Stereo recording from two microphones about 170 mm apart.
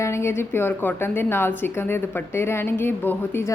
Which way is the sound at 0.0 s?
15° left (ahead or behind).